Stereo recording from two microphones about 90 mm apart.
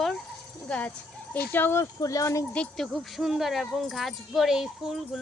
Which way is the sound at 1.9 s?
40° left (ahead or behind).